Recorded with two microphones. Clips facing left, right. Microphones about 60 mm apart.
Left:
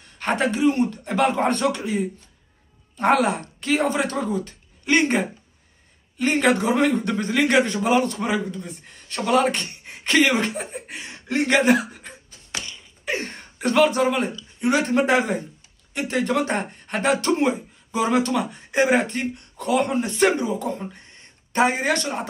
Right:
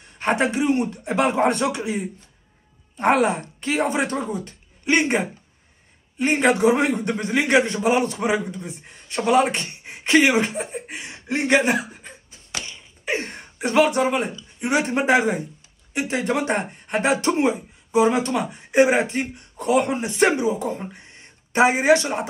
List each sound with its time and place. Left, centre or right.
0.2 s a man's voice: right
1.1 s speech: centre
4.5 s a sound: centre
6.1 s speech: centre